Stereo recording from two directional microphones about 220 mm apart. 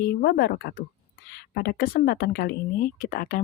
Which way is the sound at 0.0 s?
45° left (ahead or behind).